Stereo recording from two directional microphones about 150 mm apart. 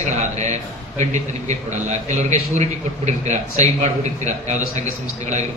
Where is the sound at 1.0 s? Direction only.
50° right (ahead or behind).